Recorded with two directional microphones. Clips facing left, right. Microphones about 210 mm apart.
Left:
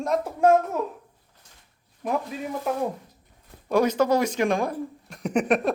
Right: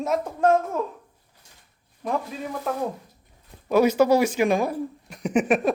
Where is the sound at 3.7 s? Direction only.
5° right (ahead or behind).